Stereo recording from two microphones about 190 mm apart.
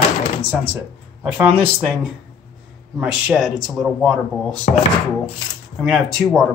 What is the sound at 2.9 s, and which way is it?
Speech, 5° right (ahead or behind).